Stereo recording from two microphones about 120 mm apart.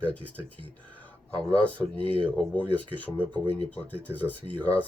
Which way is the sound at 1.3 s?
10° left (ahead or behind).